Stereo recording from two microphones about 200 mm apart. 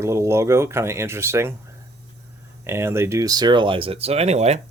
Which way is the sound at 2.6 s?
10° right (ahead or behind).